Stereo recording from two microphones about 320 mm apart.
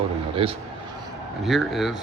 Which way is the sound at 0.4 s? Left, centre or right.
Centre.